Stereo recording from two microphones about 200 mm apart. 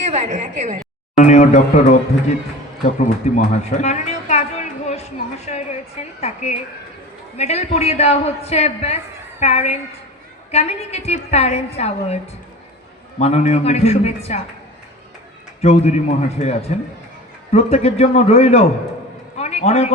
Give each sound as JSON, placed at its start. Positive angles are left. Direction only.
{"t": 0.0, "sound": "speech", "side_deg": -35}
{"t": 1.1, "sound": "a woman's voice", "side_deg": 35}
{"t": 3.0, "sound": "a sound", "side_deg": 35}
{"t": 6.1, "sound": "a woman's voice", "side_deg": 35}
{"t": 15.6, "sound": "a woman's voice", "side_deg": 35}